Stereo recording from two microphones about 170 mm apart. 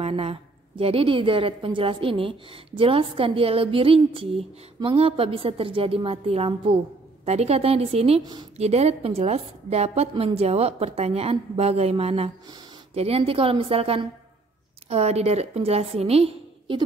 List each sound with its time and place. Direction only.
0.0 s a woman's voice: 35° right (ahead or behind)